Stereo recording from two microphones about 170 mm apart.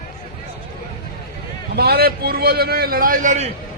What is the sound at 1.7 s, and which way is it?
A man's voice, 65° right (ahead or behind).